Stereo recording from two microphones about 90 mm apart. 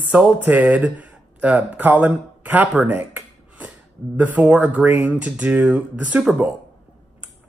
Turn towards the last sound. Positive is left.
turn(degrees=-10)  # may be behind; listen again after turning